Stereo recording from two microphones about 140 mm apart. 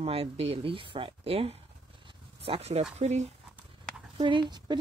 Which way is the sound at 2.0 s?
40° right (ahead or behind).